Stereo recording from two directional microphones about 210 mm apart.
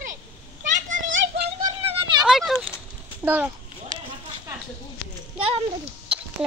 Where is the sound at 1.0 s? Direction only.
65° right (ahead or behind).